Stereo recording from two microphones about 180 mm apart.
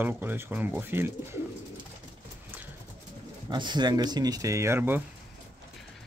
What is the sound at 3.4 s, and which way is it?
Speech, 25° right (ahead or behind).